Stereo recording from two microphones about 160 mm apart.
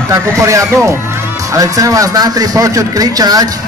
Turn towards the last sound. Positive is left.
turn(degrees=-25)  # may be behind; listen again after turning